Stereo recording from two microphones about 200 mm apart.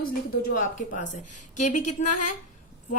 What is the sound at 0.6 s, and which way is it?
A woman's voice, 40° left (ahead or behind).